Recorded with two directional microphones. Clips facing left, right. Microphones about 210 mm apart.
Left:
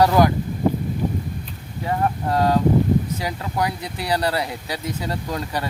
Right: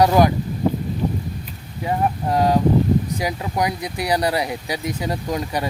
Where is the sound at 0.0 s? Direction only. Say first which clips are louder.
Right 1 dB; 20° right (ahead or behind).